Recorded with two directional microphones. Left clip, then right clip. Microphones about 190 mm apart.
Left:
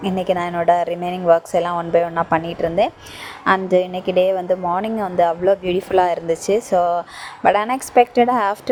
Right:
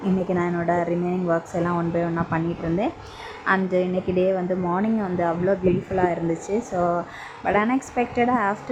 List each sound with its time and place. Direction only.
0.3 s a woman's voice: 30° left (ahead or behind)
5.6 s a woman's voice: 40° left (ahead or behind)